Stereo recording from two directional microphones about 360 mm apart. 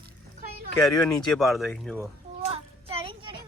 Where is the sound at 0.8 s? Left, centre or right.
Centre.